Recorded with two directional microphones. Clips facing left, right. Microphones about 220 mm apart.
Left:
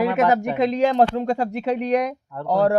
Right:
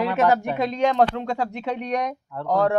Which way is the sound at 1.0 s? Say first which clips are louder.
Left 2 dB; 35° left (ahead or behind).